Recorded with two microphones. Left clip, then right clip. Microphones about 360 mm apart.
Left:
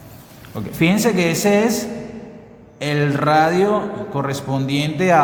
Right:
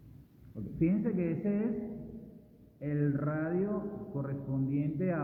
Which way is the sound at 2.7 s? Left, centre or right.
Left.